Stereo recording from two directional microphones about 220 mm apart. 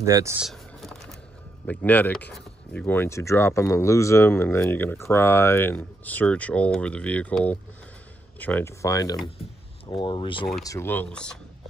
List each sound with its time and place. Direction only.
0.0 s speech: 15° right (ahead or behind)
0.4 s a sound: centre (ahead or behind)
1.7 s speech: 5° left (ahead or behind)